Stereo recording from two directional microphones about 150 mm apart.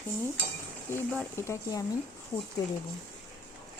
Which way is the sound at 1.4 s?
20° left (ahead or behind).